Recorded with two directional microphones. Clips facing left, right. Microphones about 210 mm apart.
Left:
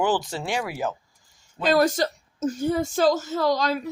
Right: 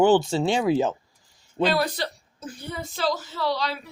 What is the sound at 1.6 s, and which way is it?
A woman's voice, 45° left (ahead or behind).